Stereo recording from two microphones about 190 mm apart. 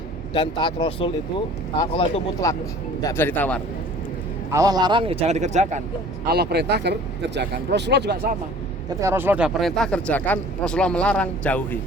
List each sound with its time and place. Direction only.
0.3 s speech: 25° left (ahead or behind)
2.4 s speech: 15° left (ahead or behind)
4.5 s a man's voice: 20° right (ahead or behind); by 5.8 s 35° right (ahead or behind)
6.2 s speech: 55° right (ahead or behind)
9.0 s speech: 10° right (ahead or behind); by 11.8 s 5° left (ahead or behind)